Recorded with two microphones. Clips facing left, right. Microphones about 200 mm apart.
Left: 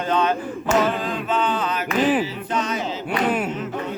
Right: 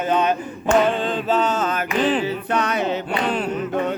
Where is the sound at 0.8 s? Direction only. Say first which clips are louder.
Right 3 dB; 30° right (ahead or behind); by 1.9 s 45° right (ahead or behind).